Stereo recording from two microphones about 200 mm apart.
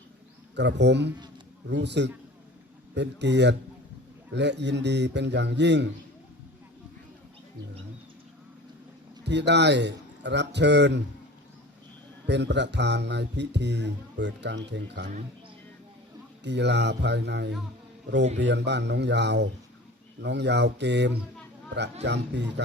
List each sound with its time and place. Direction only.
0.5 s speech: 60° right (ahead or behind)
9.2 s speech: 60° right (ahead or behind)
12.3 s speech: 60° right (ahead or behind)
16.4 s speech: 60° right (ahead or behind)